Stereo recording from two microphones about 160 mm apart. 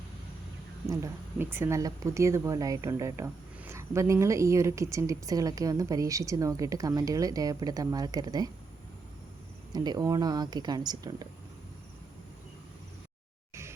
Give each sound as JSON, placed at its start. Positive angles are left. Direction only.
{"t": 0.9, "sound": "speech", "side_deg": -15}
{"t": 9.7, "sound": "speech", "side_deg": -25}
{"t": 13.5, "sound": "music", "side_deg": -15}